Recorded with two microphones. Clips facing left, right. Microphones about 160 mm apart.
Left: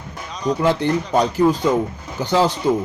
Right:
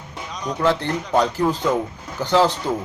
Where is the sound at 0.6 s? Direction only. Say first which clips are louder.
Left 1 dB; 15° left (ahead or behind).